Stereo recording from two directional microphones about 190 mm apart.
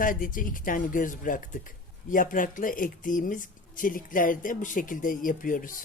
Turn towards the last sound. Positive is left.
turn(degrees=45)  # may be behind; listen again after turning